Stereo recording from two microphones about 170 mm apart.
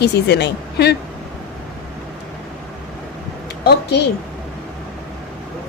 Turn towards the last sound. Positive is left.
turn(degrees=70)  # may be behind; listen again after turning